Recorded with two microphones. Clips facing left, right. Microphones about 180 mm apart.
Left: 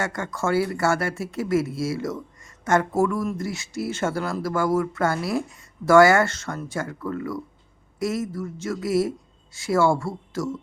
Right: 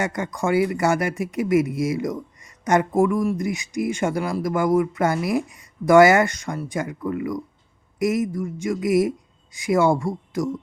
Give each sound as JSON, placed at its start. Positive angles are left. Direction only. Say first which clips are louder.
{"t": 0.0, "sound": "speech", "louder": "right 2 dB", "side_deg": -15}